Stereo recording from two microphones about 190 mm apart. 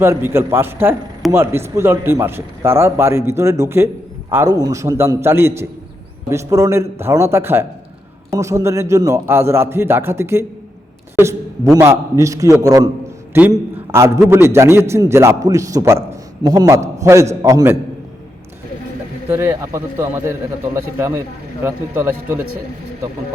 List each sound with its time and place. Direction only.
0.0 s a man's voice: 15° right (ahead or behind)
11.7 s a man's voice: 15° right (ahead or behind)
19.3 s a man's voice: 10° right (ahead or behind)
21.6 s a man's voice: 10° right (ahead or behind)